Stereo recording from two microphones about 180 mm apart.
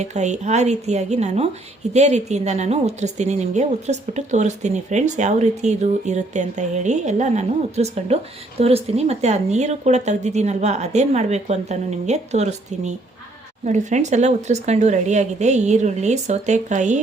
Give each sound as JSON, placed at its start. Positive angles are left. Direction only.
{"t": 0.0, "sound": "a woman's voice", "side_deg": -40}